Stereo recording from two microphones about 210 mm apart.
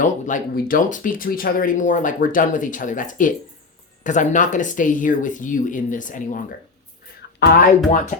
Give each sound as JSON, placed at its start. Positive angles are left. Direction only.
{"t": 0.0, "sound": "speech", "side_deg": 40}